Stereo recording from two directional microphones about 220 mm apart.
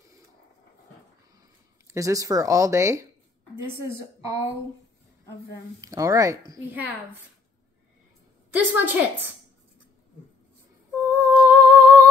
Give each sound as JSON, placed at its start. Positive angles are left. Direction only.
{"t": 1.9, "sound": "speech", "side_deg": -15}
{"t": 5.8, "sound": "speech", "side_deg": -15}
{"t": 8.5, "sound": "speech", "side_deg": -10}
{"t": 11.1, "sound": "humming", "side_deg": -10}